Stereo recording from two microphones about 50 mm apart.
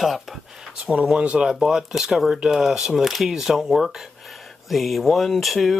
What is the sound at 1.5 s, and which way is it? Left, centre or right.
Speech, centre.